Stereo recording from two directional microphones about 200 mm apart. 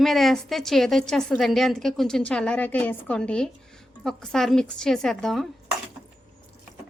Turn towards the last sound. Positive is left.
turn(degrees=0)  # may be behind; listen again after turning